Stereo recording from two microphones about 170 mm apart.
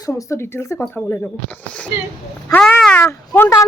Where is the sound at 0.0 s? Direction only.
15° left (ahead or behind).